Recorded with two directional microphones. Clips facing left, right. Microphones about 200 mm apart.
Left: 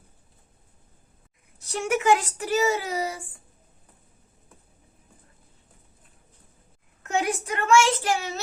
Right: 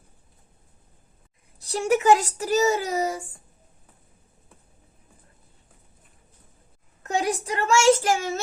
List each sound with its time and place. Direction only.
1.5 s a child's voice: 35° right (ahead or behind)
7.0 s a child's voice: 35° right (ahead or behind)